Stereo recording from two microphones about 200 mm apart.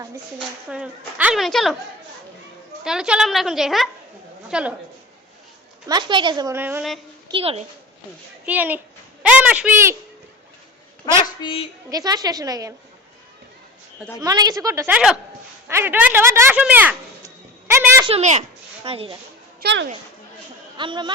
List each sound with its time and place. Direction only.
0.7 s a woman's voice: 5° right (ahead or behind)
2.8 s a woman's voice: 5° right (ahead or behind)
5.9 s a woman's voice: 25° right (ahead or behind)
7.3 s a woman's voice: 25° right (ahead or behind)
8.4 s a woman's voice: 10° right (ahead or behind)
11.0 s a woman's voice: 20° left (ahead or behind)
11.9 s a woman's voice: 20° right (ahead or behind)
14.2 s a woman's voice: 20° right (ahead or behind)
15.6 s a sound: 10° right (ahead or behind)
18.1 s speech: 35° right (ahead or behind)
19.6 s speech: 65° right (ahead or behind)
20.7 s a woman's voice: 25° right (ahead or behind)